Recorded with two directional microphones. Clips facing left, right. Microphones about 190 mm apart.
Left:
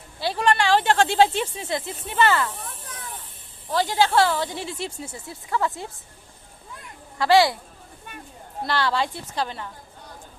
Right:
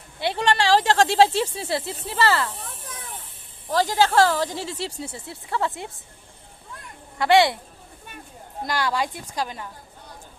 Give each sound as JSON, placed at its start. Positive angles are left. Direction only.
{"t": 0.2, "sound": "a sound", "side_deg": -25}
{"t": 1.4, "sound": "speech", "side_deg": -30}
{"t": 3.7, "sound": "speech", "side_deg": -40}
{"t": 5.0, "sound": "speech", "side_deg": -25}
{"t": 7.2, "sound": "speech", "side_deg": -20}
{"t": 8.6, "sound": "a woman's voice", "side_deg": -15}